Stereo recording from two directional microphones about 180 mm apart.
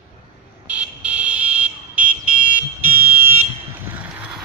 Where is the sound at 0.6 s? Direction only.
10° right (ahead or behind).